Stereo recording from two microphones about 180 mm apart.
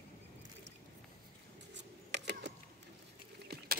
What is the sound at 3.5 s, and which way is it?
Vehicle, 65° right (ahead or behind).